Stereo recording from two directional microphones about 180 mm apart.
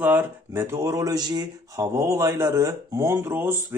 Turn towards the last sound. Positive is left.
turn(degrees=-10)  # may be behind; listen again after turning